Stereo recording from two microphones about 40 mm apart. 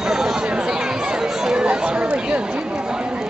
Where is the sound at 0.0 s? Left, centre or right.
Centre.